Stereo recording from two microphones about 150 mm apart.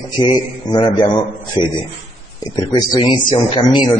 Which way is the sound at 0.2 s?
30° left (ahead or behind).